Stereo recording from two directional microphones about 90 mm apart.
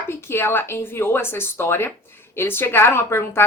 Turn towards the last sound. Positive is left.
turn(degrees=30)  # may be behind; listen again after turning